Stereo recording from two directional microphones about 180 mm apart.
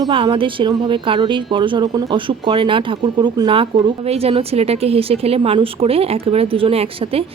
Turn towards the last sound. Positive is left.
turn(degrees=-30)  # may be behind; listen again after turning